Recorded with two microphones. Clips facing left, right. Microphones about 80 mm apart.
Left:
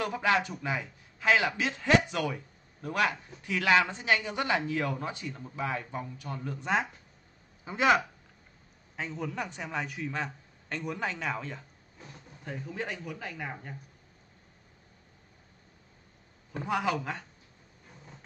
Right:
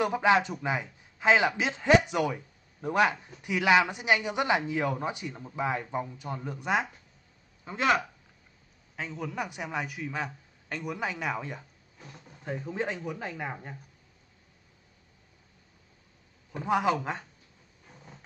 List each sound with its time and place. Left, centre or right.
0.0 s a man's voice: right
7.6 s a man's voice: centre
12.0 s a sound: centre
12.6 s a man's voice: right
16.6 s a man's voice: right